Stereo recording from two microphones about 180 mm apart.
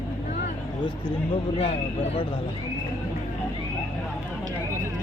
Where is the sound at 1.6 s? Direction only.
35° left (ahead or behind).